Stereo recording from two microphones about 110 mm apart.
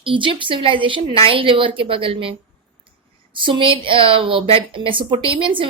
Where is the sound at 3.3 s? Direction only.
50° right (ahead or behind).